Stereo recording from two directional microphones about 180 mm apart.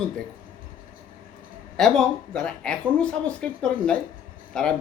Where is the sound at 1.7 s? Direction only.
5° left (ahead or behind).